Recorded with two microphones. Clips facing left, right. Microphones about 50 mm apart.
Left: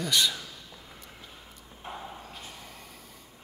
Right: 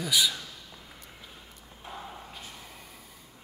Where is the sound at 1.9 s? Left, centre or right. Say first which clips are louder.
Left 2 dB; left.